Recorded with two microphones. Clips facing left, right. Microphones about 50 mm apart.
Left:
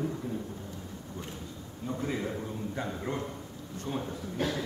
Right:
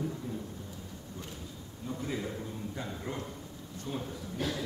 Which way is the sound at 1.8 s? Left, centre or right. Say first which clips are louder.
Left 3 dB; left.